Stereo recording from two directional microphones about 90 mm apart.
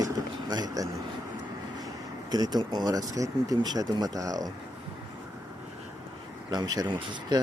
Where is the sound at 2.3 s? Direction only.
45° right (ahead or behind).